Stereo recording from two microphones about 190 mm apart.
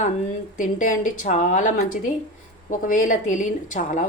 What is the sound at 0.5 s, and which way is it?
A woman's voice, 40° left (ahead or behind).